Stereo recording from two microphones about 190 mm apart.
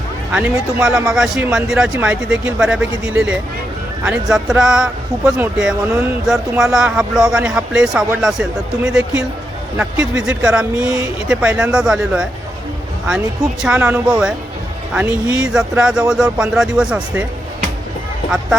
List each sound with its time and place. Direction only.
0.3 s a man's voice: 5° right (ahead or behind)
10.2 s a man's voice: 5° right (ahead or behind)